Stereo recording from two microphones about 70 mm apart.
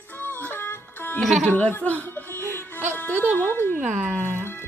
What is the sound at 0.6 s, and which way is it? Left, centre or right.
Music, left.